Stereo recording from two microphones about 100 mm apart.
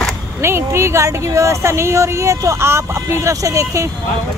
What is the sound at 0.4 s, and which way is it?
Speech, 25° right (ahead or behind).